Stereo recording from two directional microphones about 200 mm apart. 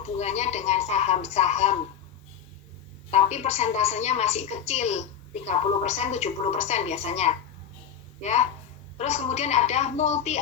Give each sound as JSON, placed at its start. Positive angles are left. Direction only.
{"t": 0.0, "sound": "a woman's voice", "side_deg": 35}
{"t": 3.1, "sound": "a woman's voice", "side_deg": 35}